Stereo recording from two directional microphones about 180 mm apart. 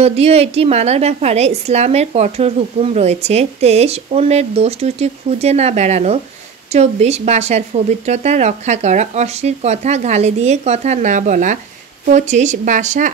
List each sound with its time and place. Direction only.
0.0 s a woman's voice: 35° right (ahead or behind)